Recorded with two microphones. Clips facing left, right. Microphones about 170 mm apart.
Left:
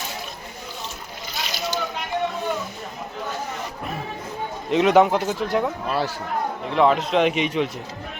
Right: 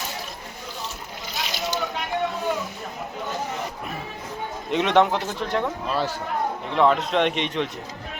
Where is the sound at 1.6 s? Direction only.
Centre (ahead or behind).